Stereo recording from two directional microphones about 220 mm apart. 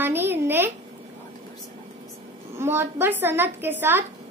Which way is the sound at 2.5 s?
10° right (ahead or behind).